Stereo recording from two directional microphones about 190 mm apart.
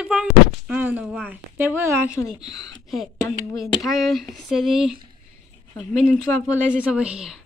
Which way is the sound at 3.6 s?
Centre (ahead or behind).